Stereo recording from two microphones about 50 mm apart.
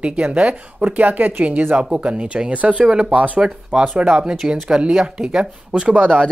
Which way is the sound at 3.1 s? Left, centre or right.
Right.